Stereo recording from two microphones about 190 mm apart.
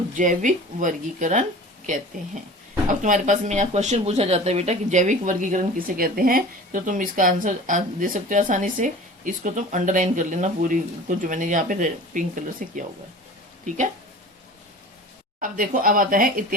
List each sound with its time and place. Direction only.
0.2 s speech: 45° right (ahead or behind)
15.4 s speech: 45° right (ahead or behind)